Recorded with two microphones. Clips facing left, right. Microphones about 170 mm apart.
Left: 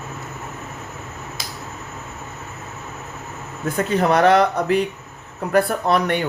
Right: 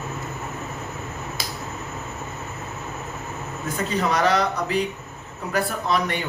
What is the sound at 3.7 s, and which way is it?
Speech, 55° left (ahead or behind).